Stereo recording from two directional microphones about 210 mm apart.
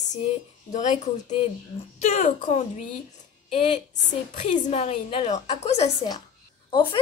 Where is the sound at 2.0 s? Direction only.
35° left (ahead or behind).